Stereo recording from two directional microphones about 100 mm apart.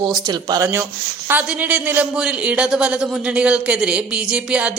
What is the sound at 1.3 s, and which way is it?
Speech, 15° right (ahead or behind).